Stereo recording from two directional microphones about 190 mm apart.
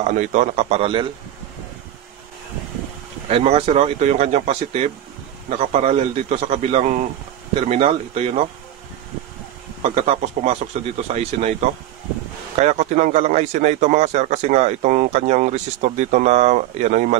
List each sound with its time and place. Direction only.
0.0 s a man's voice: 40° right (ahead or behind)
3.3 s a man's voice: 30° right (ahead or behind)
9.8 s a man's voice: 35° right (ahead or behind)